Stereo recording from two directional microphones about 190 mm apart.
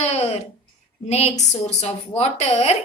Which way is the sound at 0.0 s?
35° left (ahead or behind).